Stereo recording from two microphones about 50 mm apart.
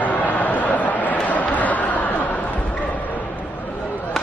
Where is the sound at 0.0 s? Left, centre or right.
Left.